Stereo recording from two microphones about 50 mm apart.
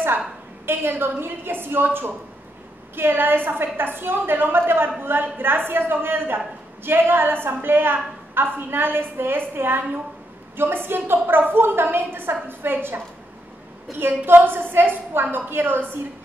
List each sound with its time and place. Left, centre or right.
0.7 s a woman's voice: right